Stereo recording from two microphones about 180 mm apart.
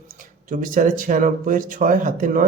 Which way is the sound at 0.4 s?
50° right (ahead or behind).